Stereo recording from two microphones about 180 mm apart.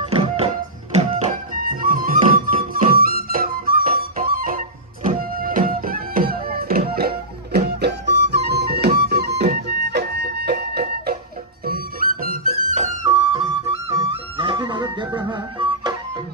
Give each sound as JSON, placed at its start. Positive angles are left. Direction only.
{"t": 0.0, "sound": "music", "side_deg": -35}
{"t": 1.5, "sound": "music", "side_deg": -50}
{"t": 12.7, "sound": "music", "side_deg": -40}